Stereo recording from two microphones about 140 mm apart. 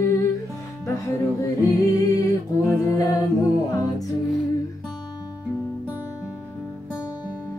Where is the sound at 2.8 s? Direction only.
25° left (ahead or behind).